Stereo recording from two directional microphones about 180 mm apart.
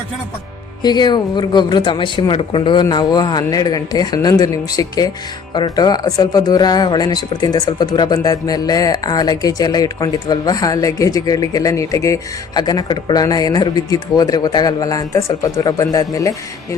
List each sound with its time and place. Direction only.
0.8 s speech: 25° left (ahead or behind)